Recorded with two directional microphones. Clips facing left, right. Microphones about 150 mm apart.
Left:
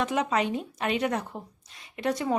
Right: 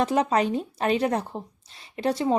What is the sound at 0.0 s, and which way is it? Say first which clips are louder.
Speech: right 4 dB; 35° right (ahead or behind).